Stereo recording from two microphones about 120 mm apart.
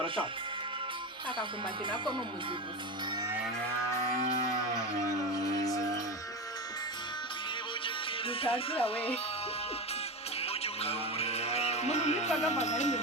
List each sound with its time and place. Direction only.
1.9 s speech: 40° right (ahead or behind)
5.3 s music: 30° left (ahead or behind)
7.9 s music: 50° left (ahead or behind)
10.4 s music: 60° left (ahead or behind); by 13.0 s 75° left (ahead or behind)